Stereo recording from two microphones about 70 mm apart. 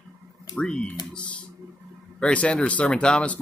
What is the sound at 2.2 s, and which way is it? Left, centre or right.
Speech, centre.